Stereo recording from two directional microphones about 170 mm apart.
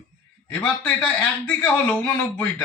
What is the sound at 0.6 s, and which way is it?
Speech, 10° left (ahead or behind).